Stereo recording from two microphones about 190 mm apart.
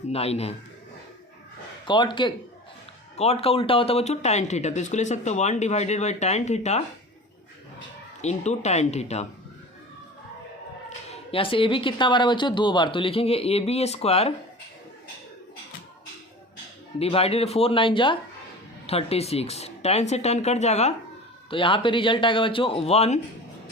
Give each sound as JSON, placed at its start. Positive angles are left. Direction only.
{"t": 0.1, "sound": "speech", "side_deg": 30}
{"t": 1.8, "sound": "speech", "side_deg": 25}
{"t": 8.2, "sound": "speech", "side_deg": 35}
{"t": 10.8, "sound": "speech", "side_deg": 30}
{"t": 17.0, "sound": "speech", "side_deg": 30}